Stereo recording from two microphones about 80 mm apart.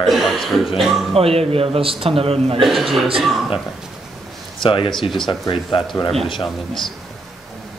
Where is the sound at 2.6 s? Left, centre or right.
Centre.